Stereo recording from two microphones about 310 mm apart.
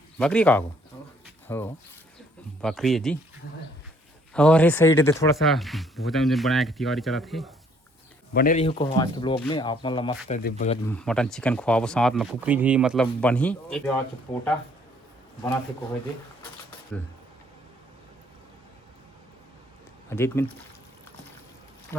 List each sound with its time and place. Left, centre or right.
0.2 s speech: centre
4.4 s speech: centre
8.3 s speech: left
8.6 s speech: centre
10.8 s speech: centre
14.3 s speech: centre
20.1 s speech: centre